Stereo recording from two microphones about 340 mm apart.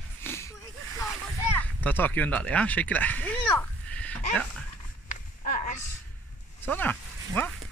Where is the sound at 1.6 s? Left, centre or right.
Centre.